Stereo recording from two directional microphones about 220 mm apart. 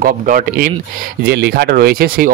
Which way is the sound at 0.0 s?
40° right (ahead or behind).